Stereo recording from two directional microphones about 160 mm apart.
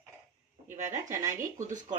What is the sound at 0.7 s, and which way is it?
Speech, 50° right (ahead or behind).